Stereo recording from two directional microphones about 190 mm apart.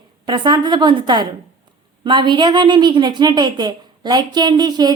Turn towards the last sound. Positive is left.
turn(degrees=-20)  # may be behind; listen again after turning